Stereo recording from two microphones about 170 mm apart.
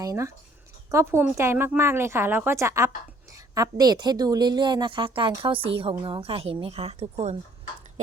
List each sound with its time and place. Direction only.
0.0 s a woman's voice: 20° right (ahead or behind); by 7.3 s 35° right (ahead or behind)